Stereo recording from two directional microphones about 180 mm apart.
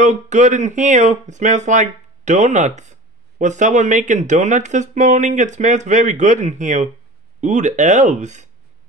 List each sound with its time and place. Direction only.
0.0 s speech: 40° right (ahead or behind)